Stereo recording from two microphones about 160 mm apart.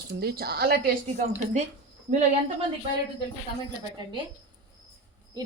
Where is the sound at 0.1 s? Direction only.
75° right (ahead or behind).